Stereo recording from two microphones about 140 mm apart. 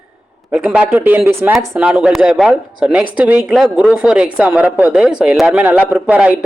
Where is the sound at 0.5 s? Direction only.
10° right (ahead or behind).